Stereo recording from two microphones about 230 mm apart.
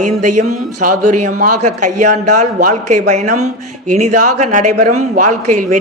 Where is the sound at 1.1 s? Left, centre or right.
Right.